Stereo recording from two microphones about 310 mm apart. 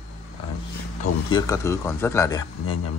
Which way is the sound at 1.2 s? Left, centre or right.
Centre.